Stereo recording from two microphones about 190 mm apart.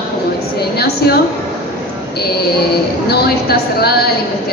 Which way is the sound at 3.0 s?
55° left (ahead or behind).